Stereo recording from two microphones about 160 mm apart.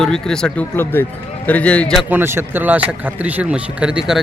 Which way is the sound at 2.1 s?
15° right (ahead or behind).